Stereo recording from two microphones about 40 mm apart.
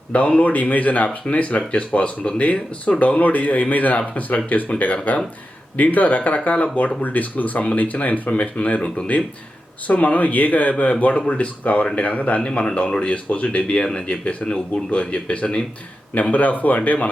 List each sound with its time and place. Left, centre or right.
0.1 s speech: left
3.2 s speech: left
16.3 s speech: left